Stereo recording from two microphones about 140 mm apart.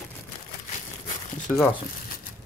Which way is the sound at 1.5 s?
Centre (ahead or behind).